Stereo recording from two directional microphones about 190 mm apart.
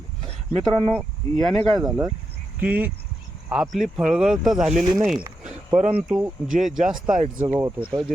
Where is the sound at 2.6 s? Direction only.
10° right (ahead or behind).